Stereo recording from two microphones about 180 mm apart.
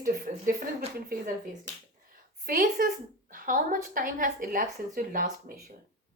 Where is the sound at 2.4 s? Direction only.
55° right (ahead or behind).